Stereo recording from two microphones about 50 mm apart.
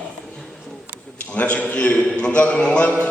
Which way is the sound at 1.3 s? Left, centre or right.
Left.